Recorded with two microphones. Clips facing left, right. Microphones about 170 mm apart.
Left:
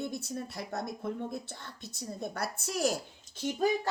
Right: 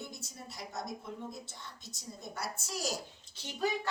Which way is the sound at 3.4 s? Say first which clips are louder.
Left 6 dB; 45° left (ahead or behind).